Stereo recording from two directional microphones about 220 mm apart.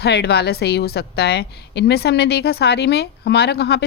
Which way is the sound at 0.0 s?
50° left (ahead or behind).